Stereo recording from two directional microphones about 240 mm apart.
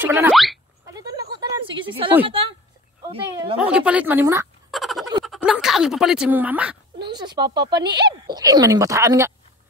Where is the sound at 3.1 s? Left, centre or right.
Right.